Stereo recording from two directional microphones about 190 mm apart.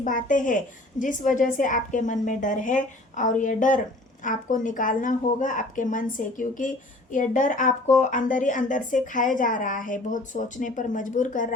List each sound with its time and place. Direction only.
0.0 s a woman's voice: 45° left (ahead or behind)